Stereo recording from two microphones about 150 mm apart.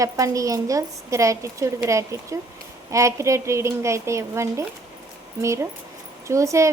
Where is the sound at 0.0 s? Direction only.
20° right (ahead or behind).